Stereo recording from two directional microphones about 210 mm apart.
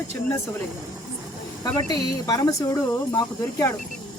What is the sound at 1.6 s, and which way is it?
Speech, 20° left (ahead or behind).